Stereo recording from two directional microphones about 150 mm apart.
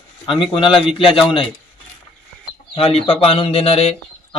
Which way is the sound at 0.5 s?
35° left (ahead or behind).